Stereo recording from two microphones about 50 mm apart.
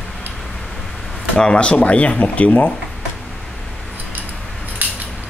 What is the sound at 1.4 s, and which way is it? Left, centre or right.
Speech, left.